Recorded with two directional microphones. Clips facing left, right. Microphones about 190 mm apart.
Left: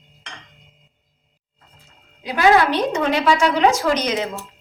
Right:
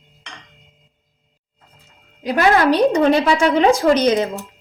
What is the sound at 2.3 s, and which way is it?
Speech, 50° right (ahead or behind).